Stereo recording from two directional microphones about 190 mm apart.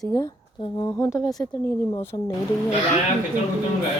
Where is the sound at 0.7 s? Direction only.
20° left (ahead or behind).